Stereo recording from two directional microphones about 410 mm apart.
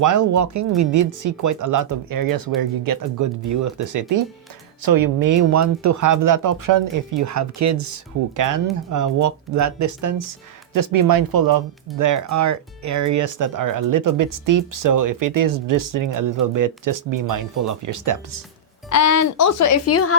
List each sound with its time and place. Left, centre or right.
0.0 s speech: right
18.9 s speech: left